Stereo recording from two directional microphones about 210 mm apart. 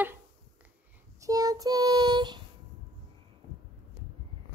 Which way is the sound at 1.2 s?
15° right (ahead or behind).